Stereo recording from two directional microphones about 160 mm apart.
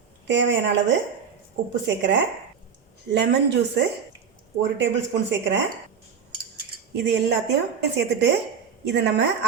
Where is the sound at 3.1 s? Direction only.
90° right.